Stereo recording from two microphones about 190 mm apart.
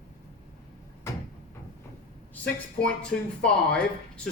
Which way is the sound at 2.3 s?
5° left (ahead or behind).